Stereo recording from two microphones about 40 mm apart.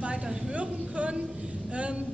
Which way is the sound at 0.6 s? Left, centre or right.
Right.